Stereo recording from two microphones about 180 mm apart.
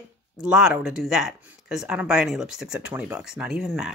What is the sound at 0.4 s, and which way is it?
Speech, 5° right (ahead or behind).